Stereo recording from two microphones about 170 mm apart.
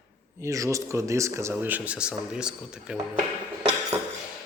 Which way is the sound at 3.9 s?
15° right (ahead or behind).